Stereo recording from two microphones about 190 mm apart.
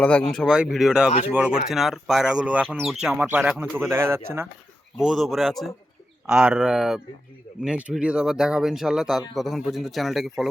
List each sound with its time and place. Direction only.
0.0 s speech: 5° left (ahead or behind); by 4.4 s 15° right (ahead or behind)
4.9 s speech: centre (ahead or behind)